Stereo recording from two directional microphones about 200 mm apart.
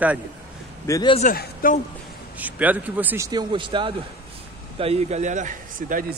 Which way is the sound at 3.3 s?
20° right (ahead or behind).